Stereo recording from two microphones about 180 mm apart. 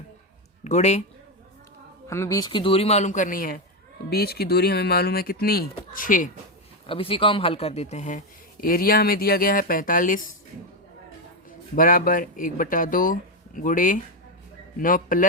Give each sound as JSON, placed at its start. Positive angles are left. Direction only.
{"t": 0.6, "sound": "speech", "side_deg": 40}
{"t": 2.0, "sound": "a man's voice", "side_deg": 15}
{"t": 6.8, "sound": "a man's voice", "side_deg": 30}
{"t": 8.6, "sound": "speech", "side_deg": 55}
{"t": 11.7, "sound": "speech", "side_deg": 50}